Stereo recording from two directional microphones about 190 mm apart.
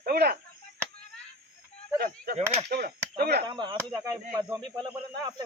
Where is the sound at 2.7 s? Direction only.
55° right (ahead or behind).